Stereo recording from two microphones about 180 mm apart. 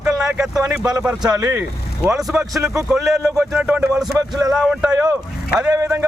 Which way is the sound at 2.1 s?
Centre (ahead or behind).